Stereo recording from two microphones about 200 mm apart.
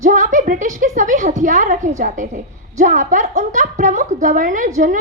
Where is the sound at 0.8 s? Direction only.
40° right (ahead or behind).